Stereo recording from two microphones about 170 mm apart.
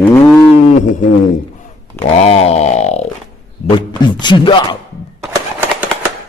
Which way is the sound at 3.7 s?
30° left (ahead or behind).